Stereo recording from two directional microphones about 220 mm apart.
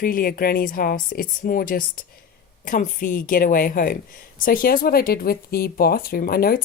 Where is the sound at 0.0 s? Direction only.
40° left (ahead or behind).